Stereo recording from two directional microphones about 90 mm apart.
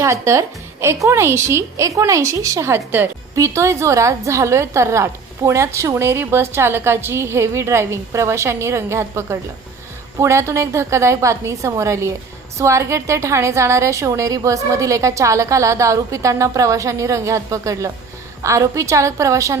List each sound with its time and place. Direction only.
0.0 s a woman's voice: 35° right (ahead or behind)